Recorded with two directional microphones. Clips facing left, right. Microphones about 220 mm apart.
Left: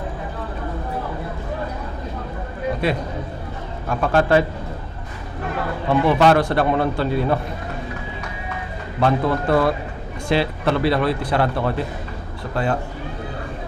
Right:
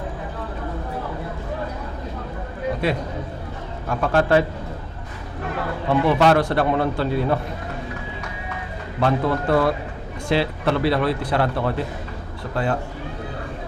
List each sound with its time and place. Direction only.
3.8 s a man's voice: 25° left (ahead or behind)
8.2 s run: 20° left (ahead or behind)
10.2 s a man's voice: 20° left (ahead or behind)